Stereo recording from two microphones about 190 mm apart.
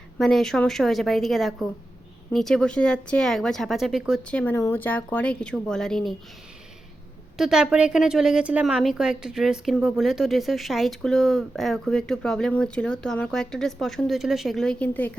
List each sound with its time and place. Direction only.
0.2 s a woman's voice: centre (ahead or behind)
7.3 s a woman's voice: centre (ahead or behind)